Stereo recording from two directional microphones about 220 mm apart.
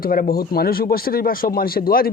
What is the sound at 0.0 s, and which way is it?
Speech, 40° left (ahead or behind).